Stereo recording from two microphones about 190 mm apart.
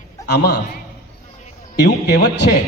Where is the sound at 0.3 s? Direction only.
60° left (ahead or behind).